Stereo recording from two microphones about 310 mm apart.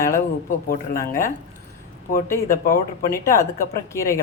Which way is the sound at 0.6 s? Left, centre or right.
Left.